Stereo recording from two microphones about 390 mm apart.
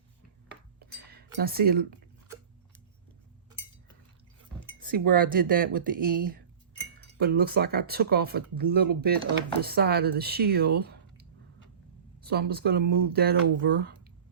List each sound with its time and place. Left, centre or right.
0.8 s a sound: right
4.6 s speech: right
7.2 s speech: right